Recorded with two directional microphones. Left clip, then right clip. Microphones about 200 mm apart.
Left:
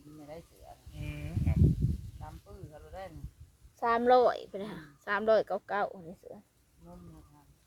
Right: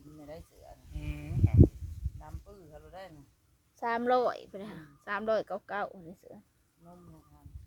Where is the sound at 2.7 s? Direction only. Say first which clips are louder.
Left 3 dB; 60° right (ahead or behind).